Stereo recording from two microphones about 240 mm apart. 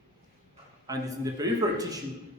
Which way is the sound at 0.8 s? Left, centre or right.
Centre.